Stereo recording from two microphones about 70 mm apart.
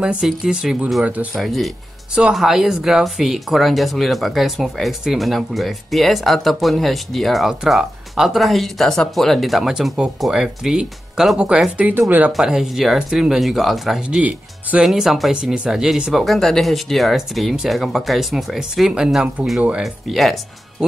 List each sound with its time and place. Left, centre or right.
0.0 s speech: centre
1.3 s speech: centre
12.3 s speech: centre
14.0 s speech: centre
14.8 s speech: centre